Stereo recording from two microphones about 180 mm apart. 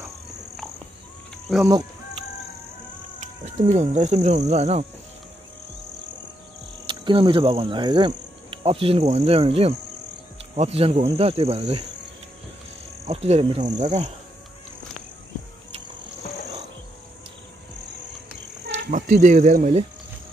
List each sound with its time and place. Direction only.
1.6 s cricket: 20° right (ahead or behind)
3.7 s speech: 40° right (ahead or behind)
6.9 s speech: 30° right (ahead or behind)
13.0 s speech: 35° right (ahead or behind)
18.8 s speech: 45° right (ahead or behind)